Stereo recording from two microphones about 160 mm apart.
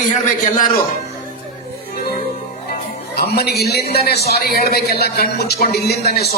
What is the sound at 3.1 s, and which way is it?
A man's voice, 80° left.